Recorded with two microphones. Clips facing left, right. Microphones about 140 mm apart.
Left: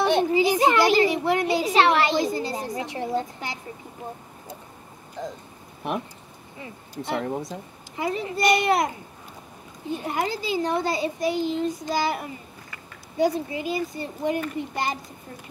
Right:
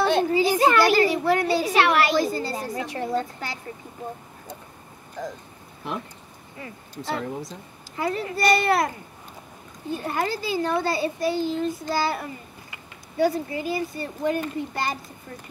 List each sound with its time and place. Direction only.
0.0 s a child's voice: 20° left (ahead or behind)
6.6 s a child's voice: 20° left (ahead or behind)
9.9 s a child's voice: 20° left (ahead or behind)